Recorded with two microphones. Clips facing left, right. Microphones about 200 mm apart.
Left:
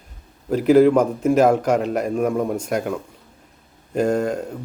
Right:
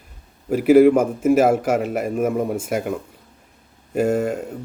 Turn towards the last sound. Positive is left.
turn(degrees=-5)  # may be behind; listen again after turning